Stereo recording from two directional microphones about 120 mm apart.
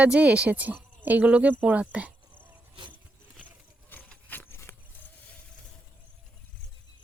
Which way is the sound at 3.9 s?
15° left (ahead or behind).